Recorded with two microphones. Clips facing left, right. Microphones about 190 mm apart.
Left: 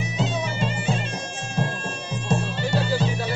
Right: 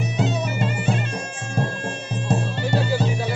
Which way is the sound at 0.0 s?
60° right (ahead or behind).